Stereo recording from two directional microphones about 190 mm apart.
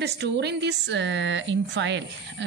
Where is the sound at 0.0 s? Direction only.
60° right (ahead or behind).